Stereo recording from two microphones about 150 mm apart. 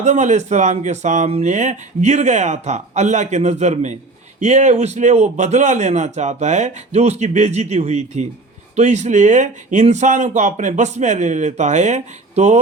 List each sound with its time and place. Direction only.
0.0 s a man's voice: 50° right (ahead or behind)